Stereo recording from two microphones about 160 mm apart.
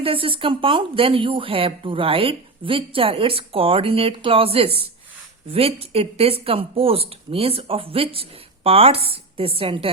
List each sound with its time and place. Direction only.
0.0 s a woman's voice: 35° right (ahead or behind)